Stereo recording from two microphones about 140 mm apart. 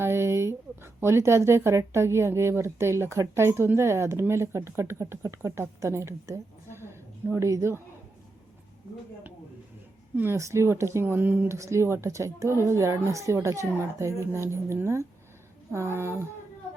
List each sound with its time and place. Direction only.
0.0 s a sound: 20° right (ahead or behind)
1.0 s speech: 20° right (ahead or behind)
10.2 s speech: 20° right (ahead or behind)